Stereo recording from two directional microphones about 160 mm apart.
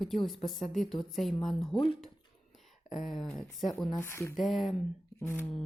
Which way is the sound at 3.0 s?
Centre (ahead or behind).